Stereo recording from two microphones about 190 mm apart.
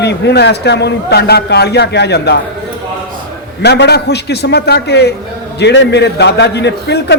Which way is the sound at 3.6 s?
60° left (ahead or behind).